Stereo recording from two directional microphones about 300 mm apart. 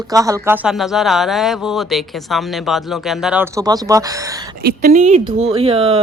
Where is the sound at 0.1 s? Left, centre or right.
Centre.